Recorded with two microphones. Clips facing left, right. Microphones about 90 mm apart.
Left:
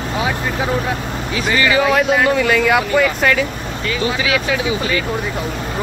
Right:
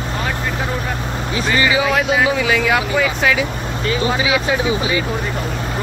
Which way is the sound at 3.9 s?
30° right (ahead or behind).